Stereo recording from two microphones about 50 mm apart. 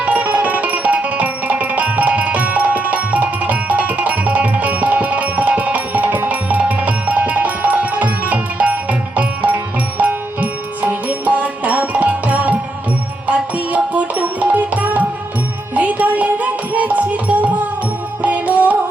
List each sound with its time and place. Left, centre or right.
0.0 s music: right